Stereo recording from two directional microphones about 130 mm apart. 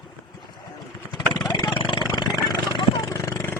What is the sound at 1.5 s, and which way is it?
Vehicle, 35° left (ahead or behind).